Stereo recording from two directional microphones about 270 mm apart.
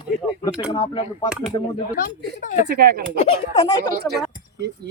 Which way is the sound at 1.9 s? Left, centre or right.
Left.